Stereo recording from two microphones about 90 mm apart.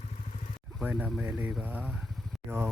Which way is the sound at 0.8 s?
10° right (ahead or behind).